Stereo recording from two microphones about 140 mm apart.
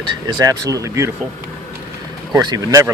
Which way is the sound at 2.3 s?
25° right (ahead or behind).